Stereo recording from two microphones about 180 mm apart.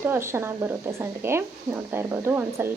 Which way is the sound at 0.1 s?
15° right (ahead or behind).